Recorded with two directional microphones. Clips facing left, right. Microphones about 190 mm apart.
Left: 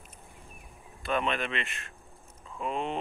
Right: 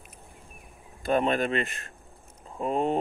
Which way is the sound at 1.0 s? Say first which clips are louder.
Right 6 dB; 40° right (ahead or behind).